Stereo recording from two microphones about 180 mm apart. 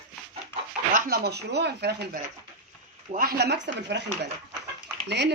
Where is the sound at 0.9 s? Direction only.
60° right (ahead or behind).